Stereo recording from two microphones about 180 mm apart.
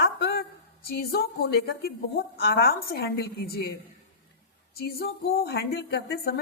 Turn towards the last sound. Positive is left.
turn(degrees=60)  # may be behind; listen again after turning